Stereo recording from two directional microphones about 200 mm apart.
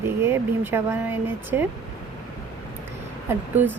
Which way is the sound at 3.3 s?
10° right (ahead or behind).